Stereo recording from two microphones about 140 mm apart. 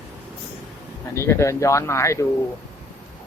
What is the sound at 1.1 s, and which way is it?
Speech, 20° left (ahead or behind).